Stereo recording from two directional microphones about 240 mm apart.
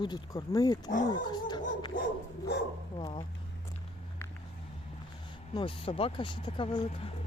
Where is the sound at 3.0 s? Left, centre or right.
Centre.